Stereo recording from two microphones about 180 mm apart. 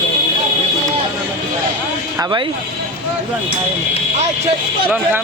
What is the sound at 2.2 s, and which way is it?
Speech, 25° right (ahead or behind).